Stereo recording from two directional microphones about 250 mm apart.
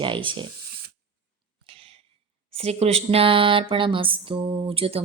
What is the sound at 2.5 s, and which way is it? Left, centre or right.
Speech, right.